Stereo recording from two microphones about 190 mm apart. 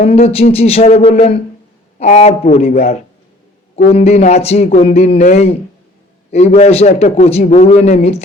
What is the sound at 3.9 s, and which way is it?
A man's voice, 35° left (ahead or behind).